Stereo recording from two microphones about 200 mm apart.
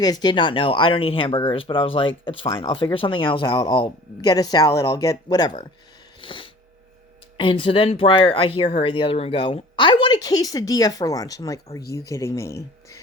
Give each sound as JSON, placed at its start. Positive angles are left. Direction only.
{"t": 0.0, "sound": "speech", "side_deg": 20}
{"t": 6.2, "sound": "a sound", "side_deg": 25}
{"t": 7.3, "sound": "speech", "side_deg": 25}